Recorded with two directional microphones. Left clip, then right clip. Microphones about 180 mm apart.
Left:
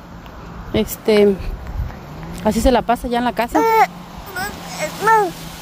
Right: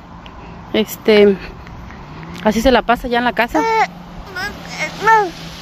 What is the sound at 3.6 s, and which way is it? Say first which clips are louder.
Vehicle: left 4 dB; 70° left (ahead or behind).